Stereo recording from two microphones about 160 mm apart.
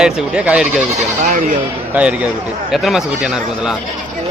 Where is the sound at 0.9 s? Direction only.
50° right (ahead or behind).